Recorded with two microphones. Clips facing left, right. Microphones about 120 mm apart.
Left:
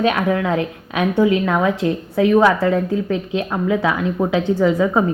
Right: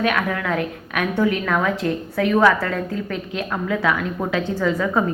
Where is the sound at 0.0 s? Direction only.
25° left (ahead or behind).